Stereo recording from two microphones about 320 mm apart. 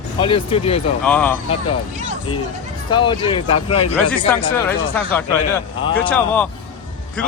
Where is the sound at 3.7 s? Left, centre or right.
Left.